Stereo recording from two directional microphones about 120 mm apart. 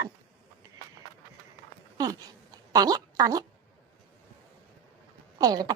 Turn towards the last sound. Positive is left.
turn(degrees=-30)  # may be behind; listen again after turning